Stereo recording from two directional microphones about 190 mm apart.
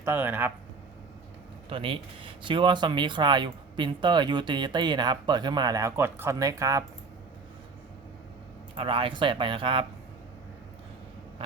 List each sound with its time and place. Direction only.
0.0 s speech: 10° right (ahead or behind)
1.7 s speech: 30° right (ahead or behind)
8.7 s speech: 30° right (ahead or behind)